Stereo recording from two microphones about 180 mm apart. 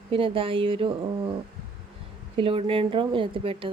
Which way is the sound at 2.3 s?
30° right (ahead or behind).